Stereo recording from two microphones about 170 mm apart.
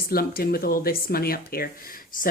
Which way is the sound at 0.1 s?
60° left (ahead or behind).